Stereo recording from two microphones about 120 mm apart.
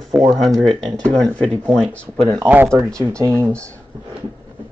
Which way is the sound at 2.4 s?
15° right (ahead or behind).